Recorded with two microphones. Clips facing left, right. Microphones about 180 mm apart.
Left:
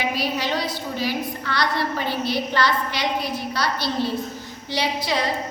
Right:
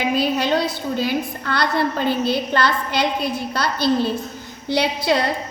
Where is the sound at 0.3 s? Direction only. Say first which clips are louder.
Right 5 dB; 55° right (ahead or behind).